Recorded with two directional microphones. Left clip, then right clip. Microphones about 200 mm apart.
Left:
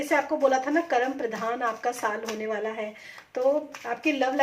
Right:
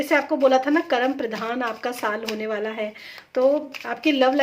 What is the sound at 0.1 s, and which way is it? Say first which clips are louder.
A woman's voice: right 4 dB; 35° right (ahead or behind).